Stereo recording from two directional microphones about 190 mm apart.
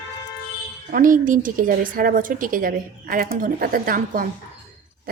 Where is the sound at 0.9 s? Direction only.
45° right (ahead or behind).